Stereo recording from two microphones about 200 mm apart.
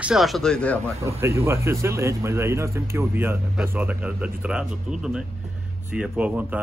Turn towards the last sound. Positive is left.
turn(degrees=-5)  # may be behind; listen again after turning